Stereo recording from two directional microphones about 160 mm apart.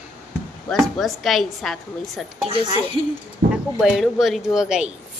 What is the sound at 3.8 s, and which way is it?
Speech, centre (ahead or behind).